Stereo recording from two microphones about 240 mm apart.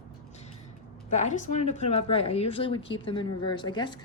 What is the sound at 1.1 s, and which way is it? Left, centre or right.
Speech, left.